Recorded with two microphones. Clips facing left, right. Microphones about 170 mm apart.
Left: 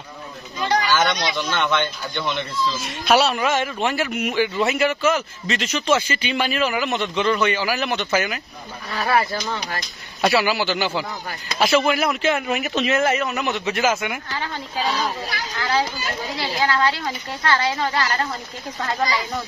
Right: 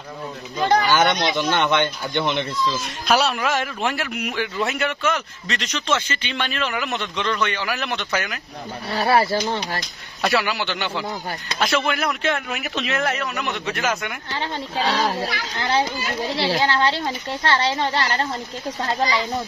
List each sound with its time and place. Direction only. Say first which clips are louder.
0.6 s children playing: right 3 dB; 50° right (ahead or behind)
0.8 s speech: right 2 dB; 20° right (ahead or behind)
3.1 s a man's voice: left 2 dB; centre (ahead or behind)
8.9 s speech: right 3 dB; 30° right (ahead or behind)
10.2 s a man's voice: left 3 dB; centre (ahead or behind)
14.3 s speech: right 1 dB; 25° right (ahead or behind)
14.9 s speech: right 2 dB; 85° right
15.6 s speech: right 1 dB; 25° right (ahead or behind)